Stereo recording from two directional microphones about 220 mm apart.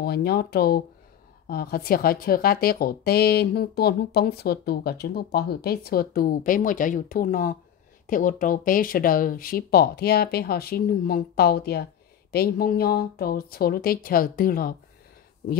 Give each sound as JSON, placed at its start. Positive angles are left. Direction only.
{"t": 0.0, "sound": "speech", "side_deg": 45}